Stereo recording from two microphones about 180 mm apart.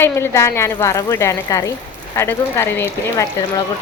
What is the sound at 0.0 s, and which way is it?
A woman's voice, 15° left (ahead or behind).